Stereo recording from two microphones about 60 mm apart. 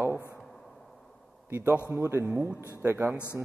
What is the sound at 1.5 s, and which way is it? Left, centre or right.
Speech, right.